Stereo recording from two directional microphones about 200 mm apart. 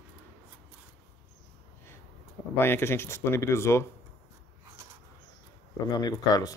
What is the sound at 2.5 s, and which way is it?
Speech, 10° left (ahead or behind).